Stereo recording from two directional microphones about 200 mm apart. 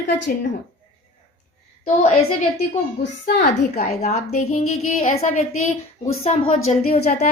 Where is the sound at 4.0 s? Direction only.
40° left (ahead or behind).